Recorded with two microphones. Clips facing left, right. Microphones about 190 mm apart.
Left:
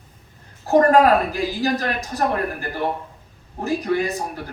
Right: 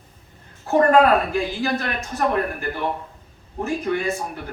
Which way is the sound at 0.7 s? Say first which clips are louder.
Left 1 dB; 40° left (ahead or behind).